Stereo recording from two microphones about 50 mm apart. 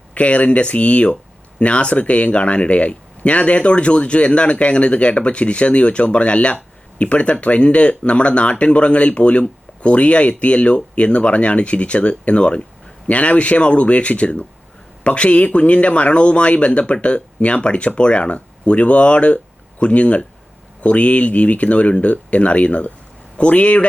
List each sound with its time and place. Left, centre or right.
0.1 s speech: left